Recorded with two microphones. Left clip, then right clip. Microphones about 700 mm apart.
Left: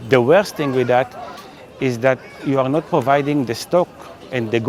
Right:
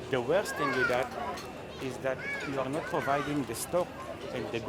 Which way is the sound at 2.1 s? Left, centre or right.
Left.